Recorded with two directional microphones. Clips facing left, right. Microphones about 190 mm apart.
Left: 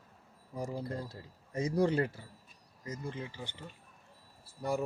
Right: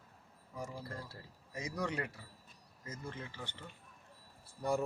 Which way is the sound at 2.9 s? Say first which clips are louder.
Left 5 dB; 15° left (ahead or behind).